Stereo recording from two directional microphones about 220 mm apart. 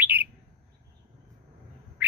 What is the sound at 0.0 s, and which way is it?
Bird, 10° right (ahead or behind).